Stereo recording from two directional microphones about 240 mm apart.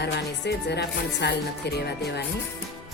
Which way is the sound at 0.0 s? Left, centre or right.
Left.